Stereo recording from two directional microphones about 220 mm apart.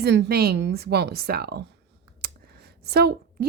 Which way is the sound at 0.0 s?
50° right (ahead or behind).